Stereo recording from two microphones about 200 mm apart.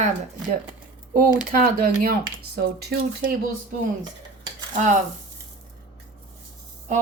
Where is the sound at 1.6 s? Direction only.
45° right (ahead or behind).